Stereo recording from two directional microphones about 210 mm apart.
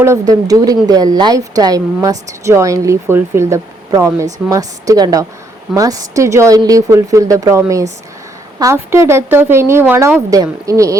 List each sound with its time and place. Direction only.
0.0 s a woman's voice: 15° right (ahead or behind)